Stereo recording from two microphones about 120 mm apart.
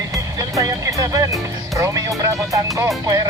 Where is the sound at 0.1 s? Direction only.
25° right (ahead or behind).